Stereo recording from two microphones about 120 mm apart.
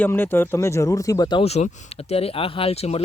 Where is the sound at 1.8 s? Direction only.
55° left (ahead or behind).